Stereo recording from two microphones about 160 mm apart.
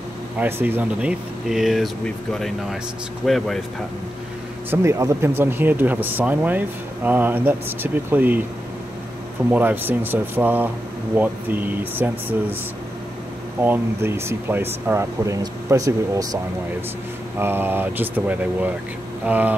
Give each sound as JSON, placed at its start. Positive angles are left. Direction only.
{"t": 0.4, "sound": "speech", "side_deg": -10}
{"t": 4.6, "sound": "speech", "side_deg": -20}
{"t": 9.5, "sound": "speech", "side_deg": -10}
{"t": 13.6, "sound": "speech", "side_deg": -15}
{"t": 17.4, "sound": "speech", "side_deg": -15}